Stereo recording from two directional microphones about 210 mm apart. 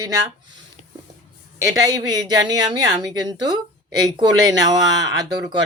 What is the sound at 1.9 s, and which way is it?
Speech, 20° right (ahead or behind).